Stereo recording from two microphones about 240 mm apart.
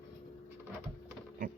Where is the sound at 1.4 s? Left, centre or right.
Right.